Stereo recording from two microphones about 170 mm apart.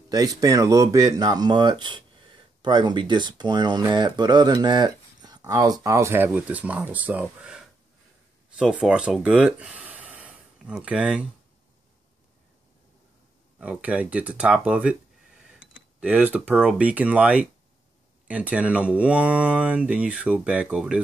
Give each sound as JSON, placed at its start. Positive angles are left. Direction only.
{"t": 0.1, "sound": "speech", "side_deg": -20}
{"t": 8.5, "sound": "a sound", "side_deg": -5}
{"t": 10.8, "sound": "speech", "side_deg": -5}
{"t": 13.6, "sound": "speech", "side_deg": -10}